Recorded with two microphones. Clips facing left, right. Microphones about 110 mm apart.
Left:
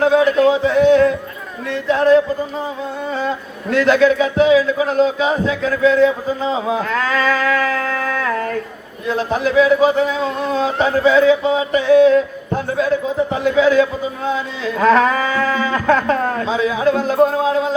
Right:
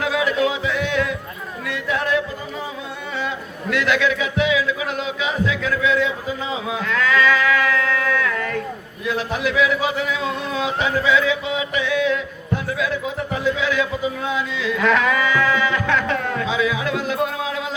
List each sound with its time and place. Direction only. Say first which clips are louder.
0.0 s speech: left 8 dB; 35° left (ahead or behind)